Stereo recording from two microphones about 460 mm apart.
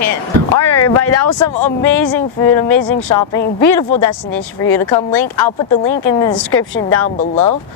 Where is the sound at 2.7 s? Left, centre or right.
Left.